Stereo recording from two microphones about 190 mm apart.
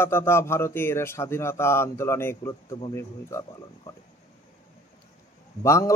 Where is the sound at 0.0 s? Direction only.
10° left (ahead or behind).